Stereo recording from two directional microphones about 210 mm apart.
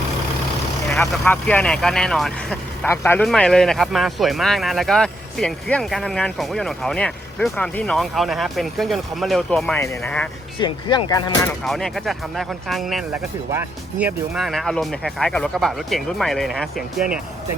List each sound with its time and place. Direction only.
0.9 s speech: 5° left (ahead or behind)
10.6 s speech: 20° left (ahead or behind)
11.4 s speech: centre (ahead or behind)